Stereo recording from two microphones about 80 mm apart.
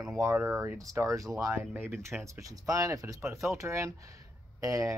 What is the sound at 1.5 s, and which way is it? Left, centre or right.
Speech, right.